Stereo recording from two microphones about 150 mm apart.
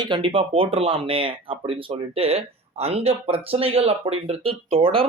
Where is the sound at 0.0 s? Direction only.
35° right (ahead or behind).